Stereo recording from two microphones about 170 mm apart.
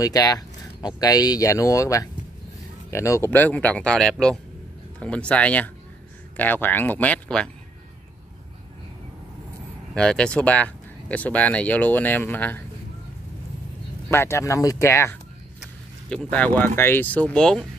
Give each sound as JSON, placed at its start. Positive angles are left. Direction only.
{"t": 0.0, "sound": "speech", "side_deg": 20}
{"t": 9.9, "sound": "speech", "side_deg": 5}
{"t": 14.1, "sound": "speech", "side_deg": 15}